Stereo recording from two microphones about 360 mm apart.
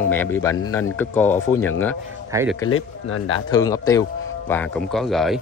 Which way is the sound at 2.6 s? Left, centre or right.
Left.